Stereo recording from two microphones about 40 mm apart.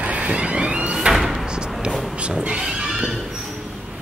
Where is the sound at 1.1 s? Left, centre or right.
Centre.